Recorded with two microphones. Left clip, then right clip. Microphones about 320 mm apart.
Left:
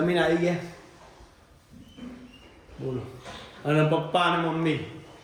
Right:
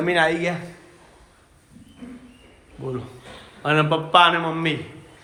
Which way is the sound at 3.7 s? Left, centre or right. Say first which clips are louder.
Right 5 dB; centre.